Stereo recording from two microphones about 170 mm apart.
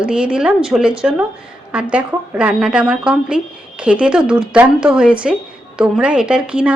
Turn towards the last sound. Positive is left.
turn(degrees=-5)  # may be behind; listen again after turning